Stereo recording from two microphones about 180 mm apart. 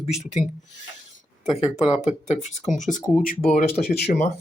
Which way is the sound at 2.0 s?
40° left (ahead or behind).